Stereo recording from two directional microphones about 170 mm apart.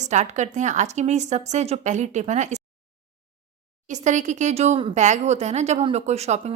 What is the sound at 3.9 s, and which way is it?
Speech, 45° right (ahead or behind).